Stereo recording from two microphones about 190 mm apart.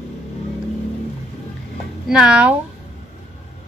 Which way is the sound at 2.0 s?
5° right (ahead or behind).